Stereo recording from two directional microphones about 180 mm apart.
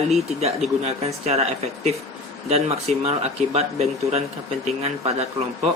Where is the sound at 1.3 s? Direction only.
35° right (ahead or behind).